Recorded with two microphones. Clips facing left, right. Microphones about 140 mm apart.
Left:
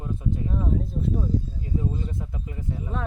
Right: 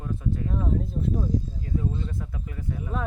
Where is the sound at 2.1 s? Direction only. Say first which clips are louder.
Left 1 dB; 20° left (ahead or behind).